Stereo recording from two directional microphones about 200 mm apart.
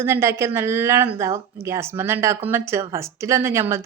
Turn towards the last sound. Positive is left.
turn(degrees=-15)  # may be behind; listen again after turning